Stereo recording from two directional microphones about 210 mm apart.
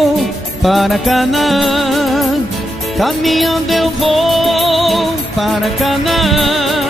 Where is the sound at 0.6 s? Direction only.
Centre (ahead or behind).